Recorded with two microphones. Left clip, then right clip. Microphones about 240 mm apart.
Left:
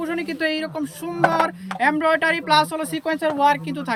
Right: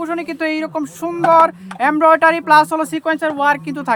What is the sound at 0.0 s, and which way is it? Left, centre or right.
Speech, centre.